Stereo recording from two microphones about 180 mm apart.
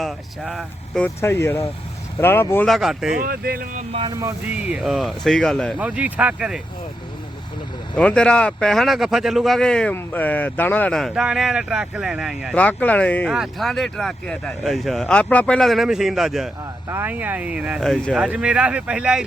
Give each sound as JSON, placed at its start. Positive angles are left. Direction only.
{"t": 0.0, "sound": "speech", "side_deg": 0}
{"t": 2.6, "sound": "speech", "side_deg": 0}
{"t": 3.2, "sound": "speech", "side_deg": -55}
{"t": 4.1, "sound": "speech", "side_deg": -15}
{"t": 7.9, "sound": "speech", "side_deg": 5}
{"t": 12.6, "sound": "speech", "side_deg": 10}